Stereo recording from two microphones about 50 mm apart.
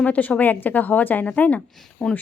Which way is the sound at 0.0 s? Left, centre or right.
Left.